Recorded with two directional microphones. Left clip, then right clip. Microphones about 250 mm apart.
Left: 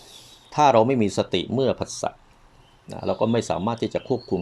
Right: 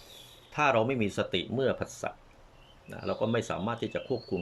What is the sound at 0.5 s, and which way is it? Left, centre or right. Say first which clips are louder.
Speech: left 9 dB; left.